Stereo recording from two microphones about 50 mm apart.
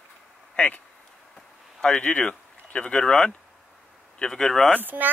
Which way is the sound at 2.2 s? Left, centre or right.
Centre.